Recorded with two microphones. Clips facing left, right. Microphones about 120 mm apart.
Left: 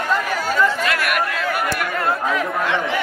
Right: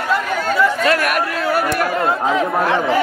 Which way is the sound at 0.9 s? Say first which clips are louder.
Right 4 dB; 40° right (ahead or behind).